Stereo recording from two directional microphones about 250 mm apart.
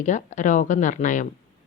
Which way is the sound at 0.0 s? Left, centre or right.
Left.